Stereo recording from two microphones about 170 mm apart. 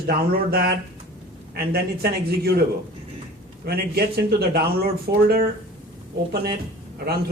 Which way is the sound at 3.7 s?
70° right (ahead or behind).